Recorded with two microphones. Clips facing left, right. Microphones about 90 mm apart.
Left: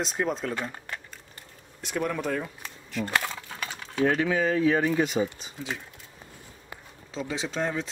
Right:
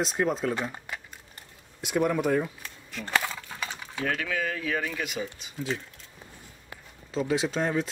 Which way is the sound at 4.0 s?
20° left (ahead or behind).